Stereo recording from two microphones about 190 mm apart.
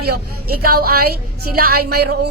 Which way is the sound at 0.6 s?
50° right (ahead or behind).